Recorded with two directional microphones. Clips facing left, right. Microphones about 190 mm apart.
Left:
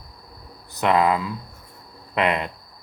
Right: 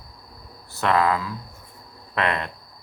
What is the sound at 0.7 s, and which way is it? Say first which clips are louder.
A man's voice: left 2 dB; 15° left (ahead or behind).